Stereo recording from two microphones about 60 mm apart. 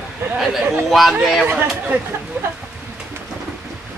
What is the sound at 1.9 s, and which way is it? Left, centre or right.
Speech, right.